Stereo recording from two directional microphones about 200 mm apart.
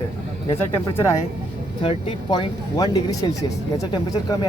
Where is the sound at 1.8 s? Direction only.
25° left (ahead or behind).